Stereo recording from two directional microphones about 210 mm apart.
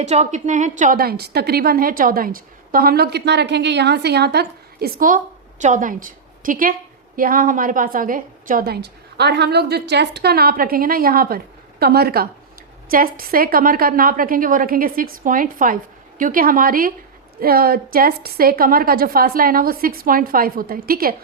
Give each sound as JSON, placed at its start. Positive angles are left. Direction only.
{"t": 0.0, "sound": "a woman's voice", "side_deg": -35}